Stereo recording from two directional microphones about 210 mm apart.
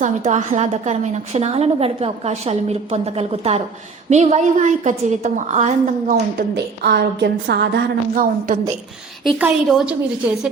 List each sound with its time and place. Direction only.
0.0 s a woman's voice: 35° right (ahead or behind)
6.8 s a woman's voice: 50° right (ahead or behind)
9.2 s a woman's voice: centre (ahead or behind)